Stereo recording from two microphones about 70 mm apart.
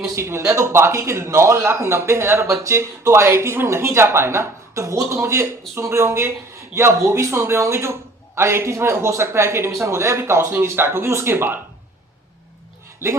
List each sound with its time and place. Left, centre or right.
0.2 s speech: right
13.0 s speech: right